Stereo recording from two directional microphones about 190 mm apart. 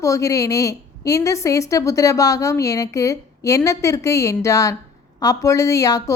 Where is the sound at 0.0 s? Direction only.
15° left (ahead or behind).